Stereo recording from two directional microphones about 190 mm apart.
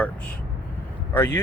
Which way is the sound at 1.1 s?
10° left (ahead or behind).